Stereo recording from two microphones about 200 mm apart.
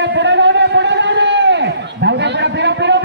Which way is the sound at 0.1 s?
60° right (ahead or behind).